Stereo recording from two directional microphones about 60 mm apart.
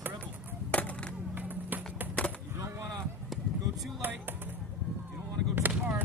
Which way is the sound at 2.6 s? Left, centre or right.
Right.